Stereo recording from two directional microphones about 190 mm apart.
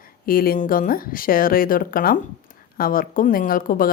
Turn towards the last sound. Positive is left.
turn(degrees=45)  # may be behind; listen again after turning